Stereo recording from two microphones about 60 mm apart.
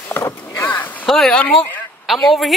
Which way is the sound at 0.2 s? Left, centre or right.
Left.